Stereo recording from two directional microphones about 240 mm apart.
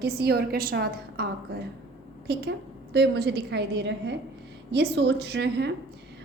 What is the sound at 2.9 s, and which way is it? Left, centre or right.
A woman's voice, right.